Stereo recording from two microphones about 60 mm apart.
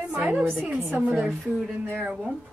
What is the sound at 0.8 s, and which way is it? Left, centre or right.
Speech, right.